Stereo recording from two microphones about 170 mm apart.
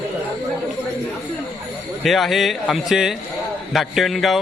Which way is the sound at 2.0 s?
Centre (ahead or behind).